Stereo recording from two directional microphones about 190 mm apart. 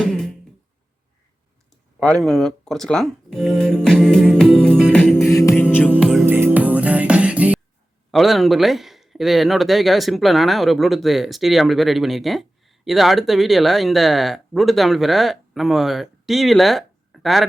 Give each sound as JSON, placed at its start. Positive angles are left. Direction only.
{"t": 0.0, "sound": "music", "side_deg": 5}
{"t": 2.0, "sound": "speech", "side_deg": 5}
{"t": 5.3, "sound": "music", "side_deg": 15}
{"t": 5.9, "sound": "music", "side_deg": -5}
{"t": 8.1, "sound": "speech", "side_deg": 0}